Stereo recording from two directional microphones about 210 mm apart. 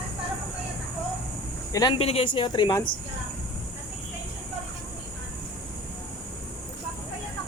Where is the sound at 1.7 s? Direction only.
20° left (ahead or behind).